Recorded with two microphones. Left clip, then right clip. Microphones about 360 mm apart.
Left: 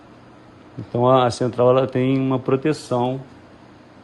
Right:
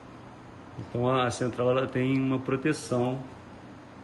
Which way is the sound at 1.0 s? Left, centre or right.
Centre.